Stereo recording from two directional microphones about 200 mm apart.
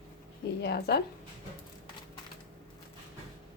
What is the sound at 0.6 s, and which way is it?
Speech, 55° left (ahead or behind).